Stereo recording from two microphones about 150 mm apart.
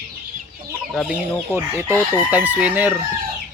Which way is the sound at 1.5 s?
15° right (ahead or behind).